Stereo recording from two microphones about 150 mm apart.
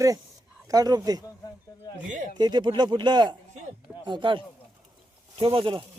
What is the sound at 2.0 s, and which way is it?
Speech, 60° right (ahead or behind).